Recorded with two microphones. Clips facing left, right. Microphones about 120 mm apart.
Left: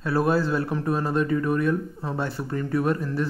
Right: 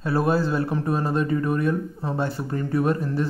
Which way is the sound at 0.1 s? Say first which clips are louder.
Even; 15° right (ahead or behind).